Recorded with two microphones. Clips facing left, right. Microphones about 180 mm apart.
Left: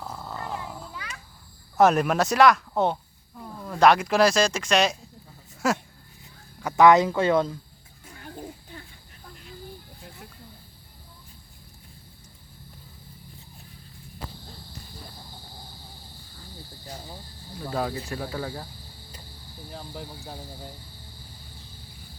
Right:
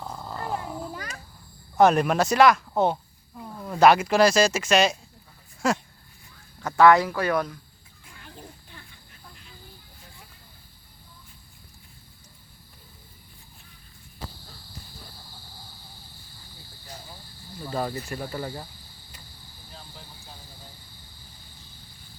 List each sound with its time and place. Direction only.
0.0 s a sound: centre (ahead or behind)
0.9 s a sound: 45° right (ahead or behind)
1.8 s speech: centre (ahead or behind)
5.6 s cricket: 5° left (ahead or behind)
6.6 s speech: 15° left (ahead or behind)
8.0 s pig: 45° left (ahead or behind)
17.7 s cricket: centre (ahead or behind)
19.7 s speech: 65° left (ahead or behind)